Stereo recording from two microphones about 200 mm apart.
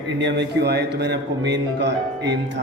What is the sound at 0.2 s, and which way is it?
Speech, 60° right (ahead or behind).